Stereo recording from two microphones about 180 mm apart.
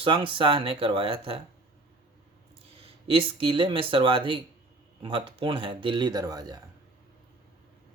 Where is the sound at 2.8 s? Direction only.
30° right (ahead or behind).